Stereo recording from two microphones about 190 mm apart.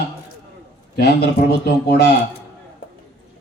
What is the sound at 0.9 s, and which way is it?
Speech, 55° left (ahead or behind).